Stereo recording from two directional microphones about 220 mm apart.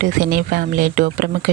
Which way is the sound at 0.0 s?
40° right (ahead or behind).